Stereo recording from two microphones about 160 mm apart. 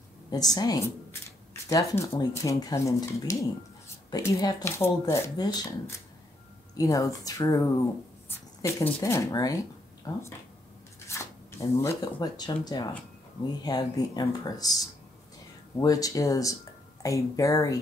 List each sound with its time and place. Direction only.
0.3 s speech: 25° left (ahead or behind)
8.7 s speech: 20° left (ahead or behind)
11.1 s speech: 15° left (ahead or behind)
15.8 s speech: 20° left (ahead or behind)